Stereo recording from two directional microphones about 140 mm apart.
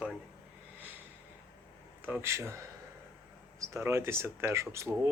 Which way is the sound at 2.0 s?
15° right (ahead or behind).